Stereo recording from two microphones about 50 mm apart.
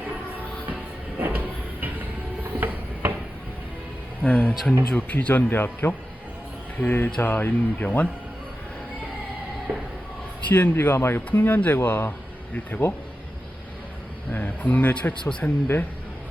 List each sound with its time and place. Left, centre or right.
1.2 s a sound: right
4.2 s a sound: left
4.9 s speech: left
5.1 s speech: left
10.5 s a man's voice: left
11.3 s speech: left
14.3 s speech: left
15.3 s speech: left
15.6 s a man's voice: left